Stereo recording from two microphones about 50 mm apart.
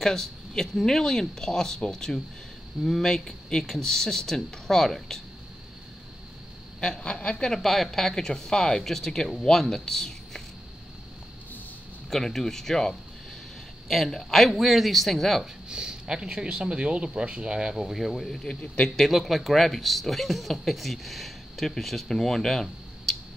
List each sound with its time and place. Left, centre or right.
0.0 s speech: centre
7.0 s a woman's voice: left
7.4 s speech: centre
12.1 s speech: centre
15.7 s speech: centre
18.9 s speech: centre